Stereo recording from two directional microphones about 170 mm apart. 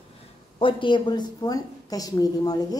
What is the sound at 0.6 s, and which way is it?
A woman's voice, 30° left (ahead or behind).